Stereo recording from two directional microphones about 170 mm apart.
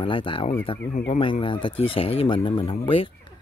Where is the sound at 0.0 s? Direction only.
30° left (ahead or behind).